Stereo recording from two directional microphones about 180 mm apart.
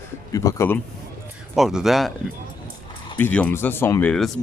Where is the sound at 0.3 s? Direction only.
20° left (ahead or behind).